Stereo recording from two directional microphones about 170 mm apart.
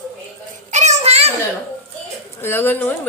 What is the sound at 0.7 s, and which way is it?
Child singing, 45° right (ahead or behind).